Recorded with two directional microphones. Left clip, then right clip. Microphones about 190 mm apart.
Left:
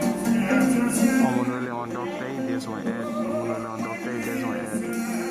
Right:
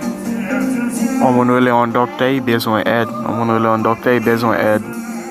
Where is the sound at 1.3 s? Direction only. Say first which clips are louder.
Right 15 dB; 15° right (ahead or behind); by 4.6 s 30° right (ahead or behind).